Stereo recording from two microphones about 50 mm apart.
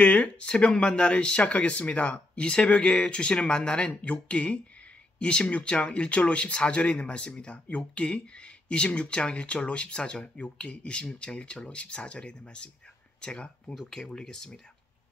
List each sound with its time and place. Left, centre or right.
0.0 s speech: left